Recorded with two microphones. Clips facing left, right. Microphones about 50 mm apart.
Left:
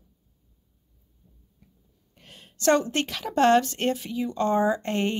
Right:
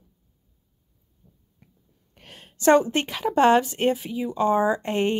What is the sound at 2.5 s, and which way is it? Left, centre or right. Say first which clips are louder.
A woman's voice: right 4 dB; centre.